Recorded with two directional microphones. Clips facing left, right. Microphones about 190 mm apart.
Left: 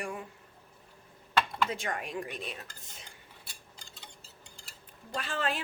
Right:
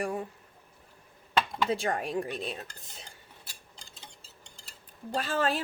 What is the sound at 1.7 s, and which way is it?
Speech, 35° right (ahead or behind).